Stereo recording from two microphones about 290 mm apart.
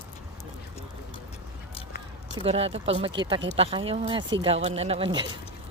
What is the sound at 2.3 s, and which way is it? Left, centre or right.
Speech, centre.